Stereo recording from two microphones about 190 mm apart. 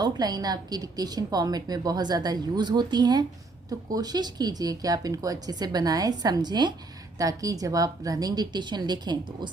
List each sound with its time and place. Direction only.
0.0 s a woman's voice: 20° right (ahead or behind)